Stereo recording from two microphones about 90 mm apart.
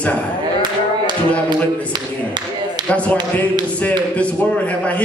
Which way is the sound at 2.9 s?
15° left (ahead or behind).